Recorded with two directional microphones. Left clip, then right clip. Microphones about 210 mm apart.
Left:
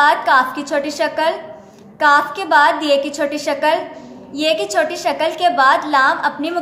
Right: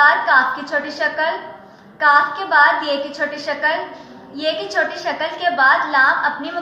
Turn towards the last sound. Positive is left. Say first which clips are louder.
# even
turn(degrees=50)  # may be behind; listen again after turning